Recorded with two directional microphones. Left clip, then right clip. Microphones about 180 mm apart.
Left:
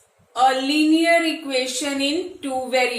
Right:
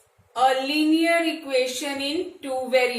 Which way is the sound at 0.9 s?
20° left (ahead or behind).